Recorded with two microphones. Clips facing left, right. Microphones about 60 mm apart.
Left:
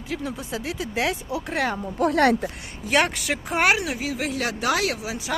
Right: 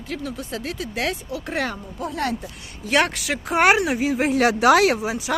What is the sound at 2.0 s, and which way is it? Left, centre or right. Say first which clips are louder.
Speech: left 7 dB; left.